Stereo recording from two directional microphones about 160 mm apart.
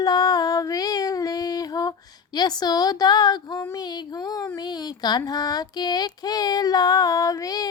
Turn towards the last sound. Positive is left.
turn(degrees=20)  # may be behind; listen again after turning